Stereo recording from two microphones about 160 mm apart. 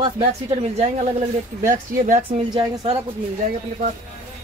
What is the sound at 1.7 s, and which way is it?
Speech, 55° right (ahead or behind).